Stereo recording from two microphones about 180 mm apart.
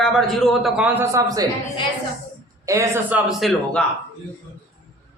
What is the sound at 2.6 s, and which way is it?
Speech, 15° right (ahead or behind).